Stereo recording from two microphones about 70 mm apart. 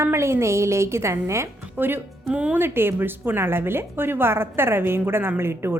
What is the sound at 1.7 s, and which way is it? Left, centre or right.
Speech, right.